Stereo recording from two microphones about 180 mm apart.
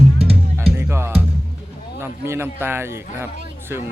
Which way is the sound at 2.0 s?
15° right (ahead or behind).